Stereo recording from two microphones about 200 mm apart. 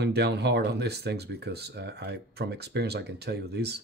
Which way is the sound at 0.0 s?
55° right (ahead or behind).